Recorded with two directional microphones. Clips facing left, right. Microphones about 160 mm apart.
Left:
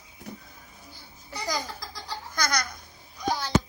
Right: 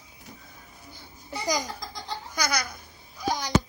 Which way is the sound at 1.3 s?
20° right (ahead or behind).